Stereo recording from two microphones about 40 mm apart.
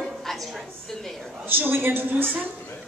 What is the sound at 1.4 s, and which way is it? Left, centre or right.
Speech, right.